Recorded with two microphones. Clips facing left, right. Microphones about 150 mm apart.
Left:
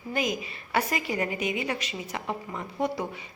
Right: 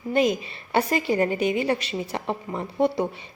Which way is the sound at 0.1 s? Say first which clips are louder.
Right 8 dB; 30° right (ahead or behind).